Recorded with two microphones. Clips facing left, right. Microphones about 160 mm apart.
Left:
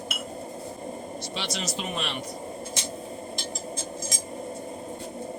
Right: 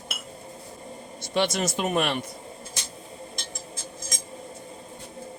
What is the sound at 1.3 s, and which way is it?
Speech, 55° right (ahead or behind).